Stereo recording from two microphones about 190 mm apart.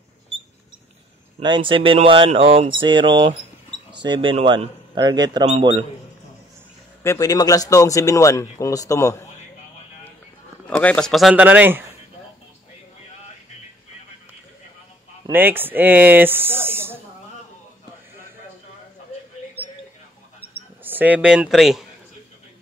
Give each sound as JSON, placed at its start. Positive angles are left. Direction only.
{"t": 1.4, "sound": "a man's voice", "side_deg": -25}
{"t": 7.0, "sound": "a man's voice", "side_deg": 15}
{"t": 10.7, "sound": "a man's voice", "side_deg": 5}
{"t": 15.2, "sound": "speech", "side_deg": -10}
{"t": 20.8, "sound": "speech", "side_deg": -10}